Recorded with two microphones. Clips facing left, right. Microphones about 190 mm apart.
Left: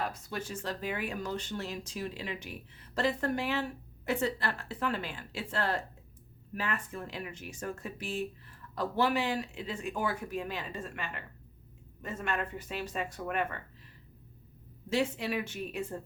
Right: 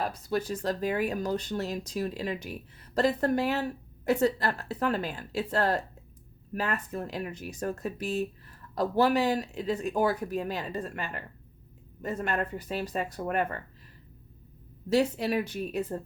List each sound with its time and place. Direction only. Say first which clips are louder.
0.0 s speech: right 6 dB; 35° right (ahead or behind)
14.8 s speech: right 5 dB; 40° right (ahead or behind)